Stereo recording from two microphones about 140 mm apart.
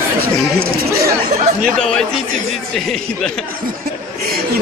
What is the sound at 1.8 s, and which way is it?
Speech, 5° left (ahead or behind).